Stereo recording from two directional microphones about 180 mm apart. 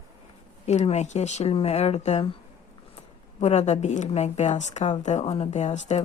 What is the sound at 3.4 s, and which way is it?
A woman's voice, 40° left (ahead or behind).